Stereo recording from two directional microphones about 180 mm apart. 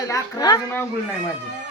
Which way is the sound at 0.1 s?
20° left (ahead or behind).